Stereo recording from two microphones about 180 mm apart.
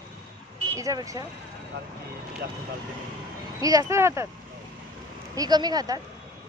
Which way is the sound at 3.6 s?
20° right (ahead or behind).